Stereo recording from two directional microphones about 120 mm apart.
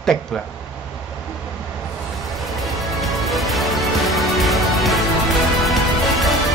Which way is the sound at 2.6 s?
Centre (ahead or behind).